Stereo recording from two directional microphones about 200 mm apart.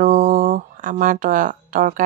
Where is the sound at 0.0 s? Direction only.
40° right (ahead or behind).